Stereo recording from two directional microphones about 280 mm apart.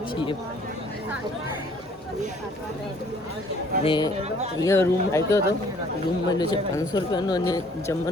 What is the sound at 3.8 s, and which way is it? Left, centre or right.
Speech, centre.